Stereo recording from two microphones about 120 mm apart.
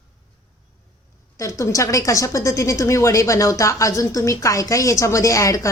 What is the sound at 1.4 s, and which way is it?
Speech, 25° left (ahead or behind).